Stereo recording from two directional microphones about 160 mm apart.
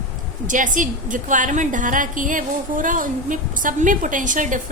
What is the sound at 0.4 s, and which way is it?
A woman's voice, 55° right (ahead or behind).